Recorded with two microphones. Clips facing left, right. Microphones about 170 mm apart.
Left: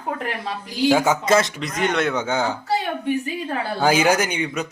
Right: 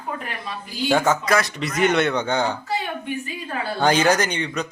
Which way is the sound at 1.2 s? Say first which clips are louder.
Left 3 dB; 20° left (ahead or behind).